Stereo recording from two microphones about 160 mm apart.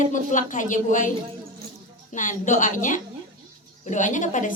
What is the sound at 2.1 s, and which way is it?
A child's voice, 50° left (ahead or behind).